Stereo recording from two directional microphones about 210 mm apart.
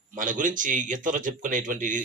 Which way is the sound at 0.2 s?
40° right (ahead or behind).